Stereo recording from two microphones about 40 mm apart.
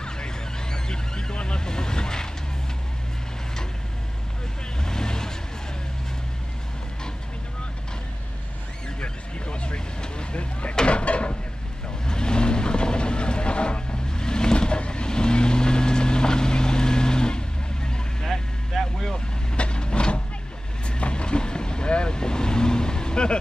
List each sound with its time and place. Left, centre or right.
0.0 s vehicle: centre
4.8 s vehicle: centre
9.0 s vehicle: left
10.9 s a sound: left
12.1 s vehicle: left
18.2 s vehicle: centre
19.1 s vehicle: left